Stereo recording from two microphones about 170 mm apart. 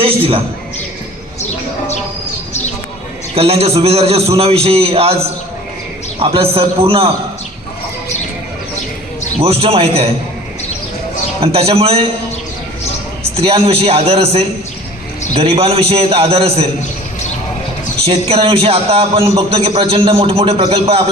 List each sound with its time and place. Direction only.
0.0 s a man's voice: 35° right (ahead or behind)
3.3 s a man's voice: 35° right (ahead or behind)
9.4 s a man's voice: 35° right (ahead or behind)
11.3 s a man's voice: 35° right (ahead or behind)
13.3 s a man's voice: 35° right (ahead or behind)
18.0 s a man's voice: 35° right (ahead or behind)